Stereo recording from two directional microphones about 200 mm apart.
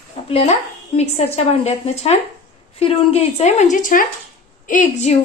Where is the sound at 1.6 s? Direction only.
30° left (ahead or behind).